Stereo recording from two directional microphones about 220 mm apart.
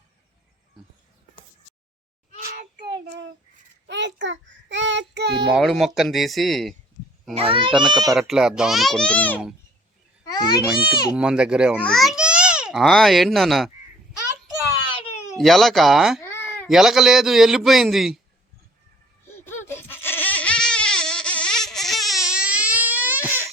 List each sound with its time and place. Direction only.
2.7 s child singing: 50° right (ahead or behind)
5.5 s a man's voice: centre (ahead or behind)
7.3 s a child's voice: 25° right (ahead or behind)
8.3 s a man's voice: centre (ahead or behind)
10.2 s a child's voice: 20° left (ahead or behind)
11.1 s a man's voice: 5° right (ahead or behind)
15.0 s cat: 10° left (ahead or behind)
15.4 s a man's voice: centre (ahead or behind)
16.2 s a sound: 10° left (ahead or behind)
16.6 s a man's voice: centre (ahead or behind)
19.4 s a sound: 10° left (ahead or behind); by 23.5 s 10° right (ahead or behind)